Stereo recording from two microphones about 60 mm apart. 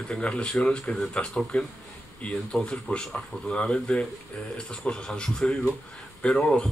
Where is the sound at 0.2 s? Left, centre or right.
Left.